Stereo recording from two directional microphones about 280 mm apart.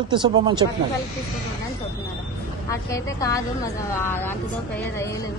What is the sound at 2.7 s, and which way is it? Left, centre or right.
A woman's voice, centre.